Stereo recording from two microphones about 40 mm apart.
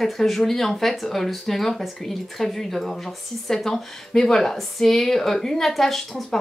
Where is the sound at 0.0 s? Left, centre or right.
Centre.